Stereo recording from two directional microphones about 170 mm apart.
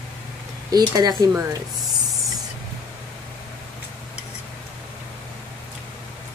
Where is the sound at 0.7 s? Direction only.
25° right (ahead or behind).